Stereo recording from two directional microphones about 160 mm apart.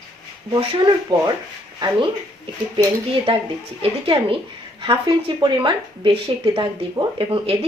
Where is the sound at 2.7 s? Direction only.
35° right (ahead or behind).